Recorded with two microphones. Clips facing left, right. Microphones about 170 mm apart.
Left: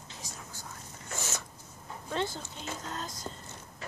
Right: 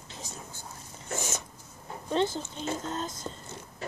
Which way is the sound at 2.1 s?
20° right (ahead or behind).